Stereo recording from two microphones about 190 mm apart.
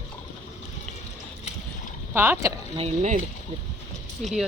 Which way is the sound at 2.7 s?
35° right (ahead or behind).